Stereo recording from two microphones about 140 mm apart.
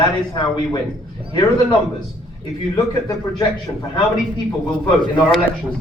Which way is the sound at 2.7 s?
25° left (ahead or behind).